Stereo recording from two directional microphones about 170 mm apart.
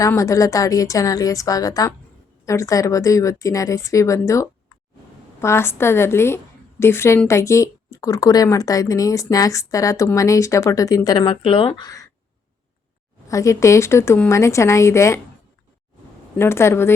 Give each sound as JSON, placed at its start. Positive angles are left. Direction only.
{"t": 0.0, "sound": "a woman's voice", "side_deg": 20}
{"t": 13.2, "sound": "speech", "side_deg": 20}
{"t": 16.4, "sound": "speech", "side_deg": 15}